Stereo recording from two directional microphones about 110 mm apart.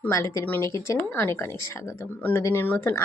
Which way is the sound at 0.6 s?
30° left (ahead or behind).